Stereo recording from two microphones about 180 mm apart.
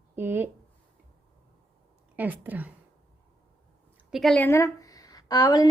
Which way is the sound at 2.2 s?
10° right (ahead or behind).